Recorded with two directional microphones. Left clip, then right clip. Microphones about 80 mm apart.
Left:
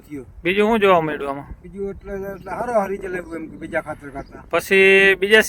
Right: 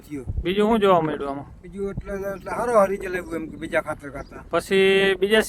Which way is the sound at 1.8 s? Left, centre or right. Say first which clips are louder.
Left 1 dB; right.